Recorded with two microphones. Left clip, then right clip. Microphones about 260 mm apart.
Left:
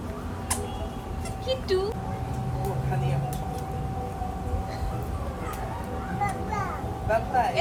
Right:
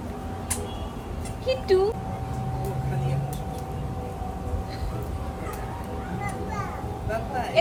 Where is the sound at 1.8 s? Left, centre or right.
Centre.